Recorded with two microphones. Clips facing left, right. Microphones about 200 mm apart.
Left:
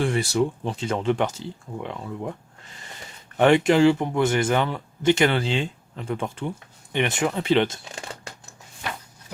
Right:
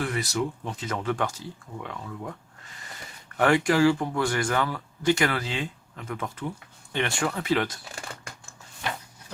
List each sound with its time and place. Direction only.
0.0 s speech: 30° left (ahead or behind)
3.3 s speech: 25° left (ahead or behind)